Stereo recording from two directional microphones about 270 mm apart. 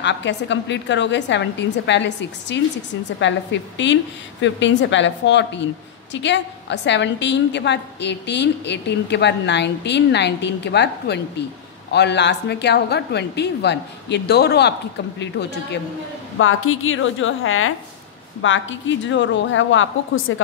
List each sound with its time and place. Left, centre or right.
0.0 s a woman's voice: left
16.3 s a woman's voice: left